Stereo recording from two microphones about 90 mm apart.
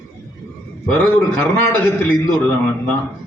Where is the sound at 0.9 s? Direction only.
20° left (ahead or behind).